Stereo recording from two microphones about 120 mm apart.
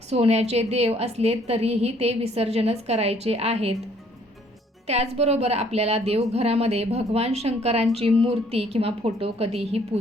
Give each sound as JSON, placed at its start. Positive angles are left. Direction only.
{"t": 0.1, "sound": "a woman's voice", "side_deg": -60}
{"t": 4.9, "sound": "a woman's voice", "side_deg": -60}